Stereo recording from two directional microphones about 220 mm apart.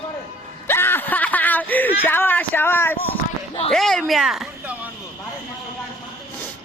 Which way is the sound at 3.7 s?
Centre (ahead or behind).